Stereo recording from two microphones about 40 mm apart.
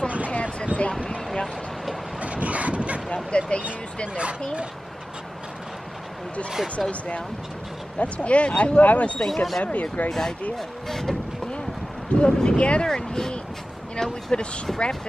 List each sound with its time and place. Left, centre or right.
0.3 s a sound: left
2.1 s dog: right
3.3 s speech: left
4.2 s speech: right
6.5 s speech: centre
6.9 s speech: left
9.2 s speech: centre
9.6 s speech: left
10.0 s speech: centre
12.1 s speech: left
12.8 s speech: centre
14.7 s speech: centre